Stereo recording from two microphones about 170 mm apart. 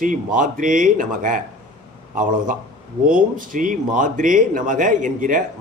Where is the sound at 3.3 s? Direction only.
55° right (ahead or behind).